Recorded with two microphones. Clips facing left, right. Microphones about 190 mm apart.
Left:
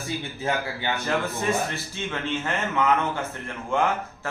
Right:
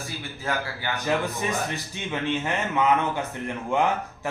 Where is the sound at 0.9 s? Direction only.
15° right (ahead or behind).